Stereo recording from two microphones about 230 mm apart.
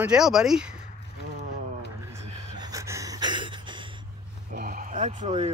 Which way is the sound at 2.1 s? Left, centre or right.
Centre.